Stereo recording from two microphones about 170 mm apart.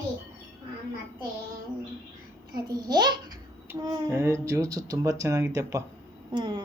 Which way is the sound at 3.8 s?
15° right (ahead or behind).